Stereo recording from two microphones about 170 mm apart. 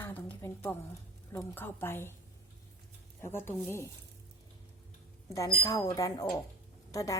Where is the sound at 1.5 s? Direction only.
15° left (ahead or behind).